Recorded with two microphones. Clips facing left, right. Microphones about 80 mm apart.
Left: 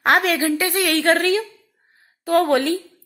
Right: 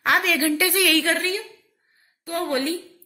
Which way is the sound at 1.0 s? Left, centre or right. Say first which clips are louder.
Left 7 dB; left.